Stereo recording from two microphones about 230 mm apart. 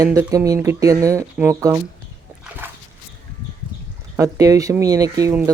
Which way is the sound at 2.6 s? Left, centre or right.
Centre.